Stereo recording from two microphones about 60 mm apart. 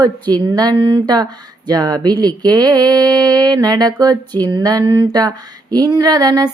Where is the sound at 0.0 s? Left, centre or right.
Right.